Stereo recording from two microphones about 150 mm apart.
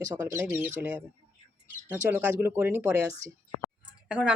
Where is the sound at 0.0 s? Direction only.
20° right (ahead or behind).